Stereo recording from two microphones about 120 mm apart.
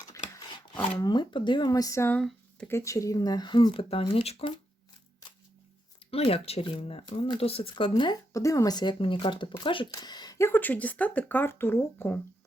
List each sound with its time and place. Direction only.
0.0 s speech: 30° left (ahead or behind)
2.1 s a sound: 5° left (ahead or behind)
2.6 s speech: 25° left (ahead or behind); by 4.5 s 55° left (ahead or behind)
6.1 s speech: 55° left (ahead or behind)
8.3 s speech: 25° left (ahead or behind)
10.3 s speech: 20° left (ahead or behind)